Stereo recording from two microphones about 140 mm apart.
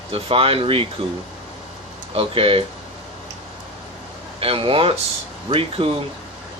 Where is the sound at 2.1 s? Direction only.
40° right (ahead or behind).